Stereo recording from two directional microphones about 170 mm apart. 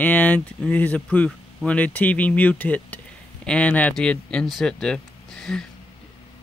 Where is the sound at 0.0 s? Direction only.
10° left (ahead or behind).